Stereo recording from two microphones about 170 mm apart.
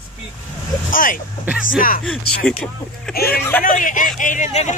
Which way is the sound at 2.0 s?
5° left (ahead or behind).